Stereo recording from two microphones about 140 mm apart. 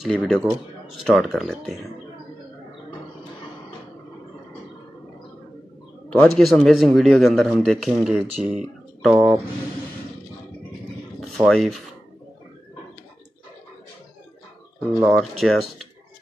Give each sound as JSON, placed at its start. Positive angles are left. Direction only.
{"t": 0.0, "sound": "speech", "side_deg": 5}
{"t": 6.3, "sound": "speech", "side_deg": 5}
{"t": 11.1, "sound": "speech", "side_deg": 5}
{"t": 14.9, "sound": "speech", "side_deg": -25}
{"t": 15.1, "sound": "speech", "side_deg": 0}